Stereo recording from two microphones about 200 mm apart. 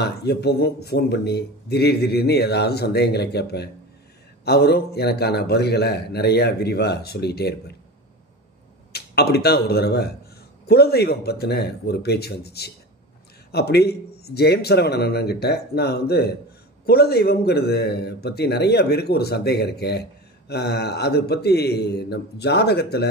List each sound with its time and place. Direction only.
0.0 s a man's voice: 55° left (ahead or behind)
8.9 s a man's voice: 55° left (ahead or behind)